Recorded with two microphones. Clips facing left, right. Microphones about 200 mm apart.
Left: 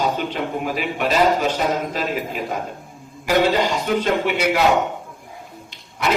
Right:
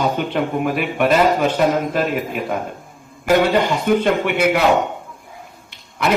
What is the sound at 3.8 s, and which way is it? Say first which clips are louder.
Speech: right 3 dB; 55° right (ahead or behind).